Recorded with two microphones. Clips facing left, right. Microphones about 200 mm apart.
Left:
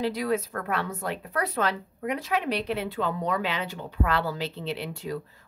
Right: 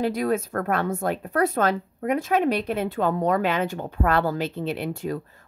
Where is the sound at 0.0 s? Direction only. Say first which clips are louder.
Right 3 dB; 50° right (ahead or behind).